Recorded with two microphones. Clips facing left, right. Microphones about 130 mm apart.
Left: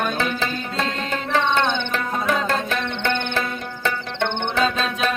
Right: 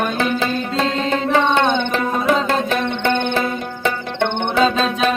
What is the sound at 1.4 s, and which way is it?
Music, 50° right (ahead or behind).